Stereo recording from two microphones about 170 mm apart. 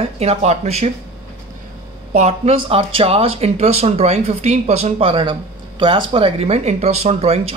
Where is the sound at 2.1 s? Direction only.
40° right (ahead or behind).